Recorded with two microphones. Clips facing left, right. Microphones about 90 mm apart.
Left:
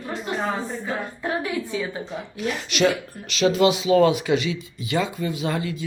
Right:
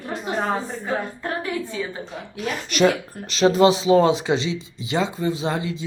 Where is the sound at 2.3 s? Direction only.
45° right (ahead or behind); by 5.8 s 25° right (ahead or behind).